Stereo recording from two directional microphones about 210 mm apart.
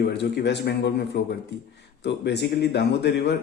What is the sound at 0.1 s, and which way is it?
A man's voice, 55° left (ahead or behind).